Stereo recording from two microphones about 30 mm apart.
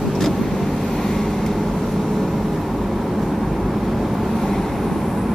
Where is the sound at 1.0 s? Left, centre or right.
Centre.